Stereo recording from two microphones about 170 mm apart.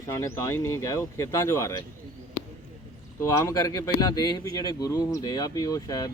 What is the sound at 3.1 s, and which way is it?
Speech, 15° left (ahead or behind).